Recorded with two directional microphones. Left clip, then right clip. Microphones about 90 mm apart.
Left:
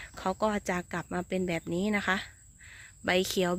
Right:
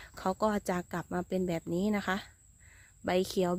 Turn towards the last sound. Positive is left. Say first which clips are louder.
# left 2 dB
turn(degrees=-30)  # may be behind; listen again after turning